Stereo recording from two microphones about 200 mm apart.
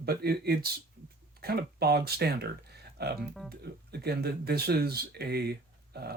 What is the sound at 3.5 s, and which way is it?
Speech, 55° right (ahead or behind).